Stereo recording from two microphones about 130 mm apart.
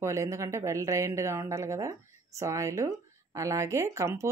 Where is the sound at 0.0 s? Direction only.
25° right (ahead or behind).